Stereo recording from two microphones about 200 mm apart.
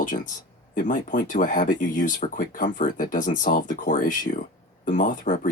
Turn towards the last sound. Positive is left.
turn(degrees=40)  # may be behind; listen again after turning